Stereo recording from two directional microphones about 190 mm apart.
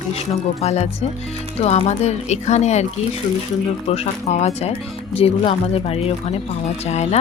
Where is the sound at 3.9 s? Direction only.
35° left (ahead or behind).